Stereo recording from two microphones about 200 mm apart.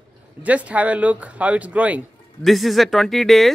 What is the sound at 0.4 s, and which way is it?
Speech, 5° right (ahead or behind).